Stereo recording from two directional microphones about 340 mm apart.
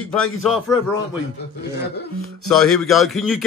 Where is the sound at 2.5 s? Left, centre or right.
Centre.